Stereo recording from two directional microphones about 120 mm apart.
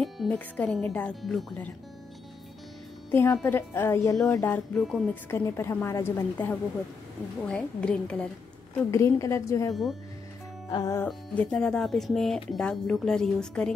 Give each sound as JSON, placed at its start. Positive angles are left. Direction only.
{"t": 0.0, "sound": "speech", "side_deg": 5}
{"t": 3.1, "sound": "a woman's voice", "side_deg": 20}
{"t": 4.7, "sound": "speech", "side_deg": 0}
{"t": 5.3, "sound": "a woman's voice", "side_deg": 25}
{"t": 8.9, "sound": "a woman's voice", "side_deg": 25}
{"t": 10.7, "sound": "music", "side_deg": 35}
{"t": 11.3, "sound": "speech", "side_deg": 5}